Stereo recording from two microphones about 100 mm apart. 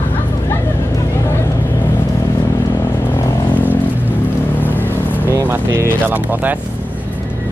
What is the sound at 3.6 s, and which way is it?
Vehicle, 15° right (ahead or behind).